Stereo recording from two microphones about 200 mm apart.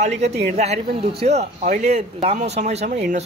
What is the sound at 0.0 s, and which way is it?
Speech, 35° right (ahead or behind).